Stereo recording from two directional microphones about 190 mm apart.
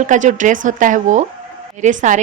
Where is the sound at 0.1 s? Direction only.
40° right (ahead or behind).